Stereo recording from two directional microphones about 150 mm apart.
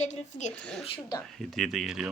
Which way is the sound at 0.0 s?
55° left (ahead or behind).